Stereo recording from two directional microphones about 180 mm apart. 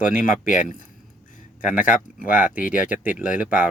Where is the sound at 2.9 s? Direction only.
10° right (ahead or behind).